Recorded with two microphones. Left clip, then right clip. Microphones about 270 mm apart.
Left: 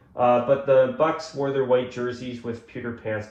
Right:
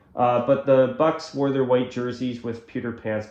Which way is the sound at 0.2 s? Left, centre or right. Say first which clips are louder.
Even; right.